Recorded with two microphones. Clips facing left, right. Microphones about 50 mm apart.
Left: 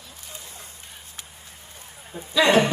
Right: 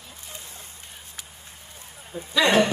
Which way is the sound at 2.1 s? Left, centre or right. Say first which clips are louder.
Right 2 dB; left.